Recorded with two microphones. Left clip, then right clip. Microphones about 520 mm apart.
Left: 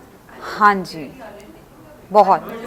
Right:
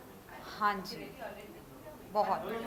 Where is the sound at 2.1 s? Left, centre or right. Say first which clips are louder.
Left 19 dB; left.